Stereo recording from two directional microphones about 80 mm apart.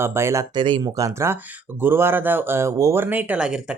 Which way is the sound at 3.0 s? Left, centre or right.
Right.